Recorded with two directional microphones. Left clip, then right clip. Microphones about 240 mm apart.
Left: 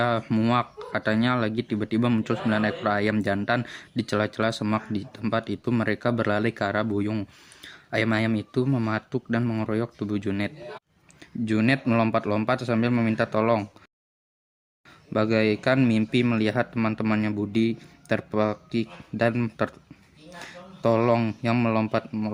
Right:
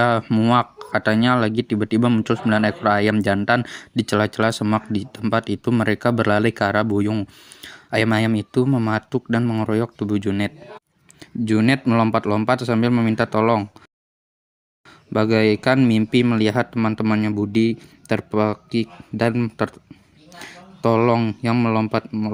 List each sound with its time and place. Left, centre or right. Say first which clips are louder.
0.0 s speech: right 6 dB; right
14.8 s speech: right 5 dB; right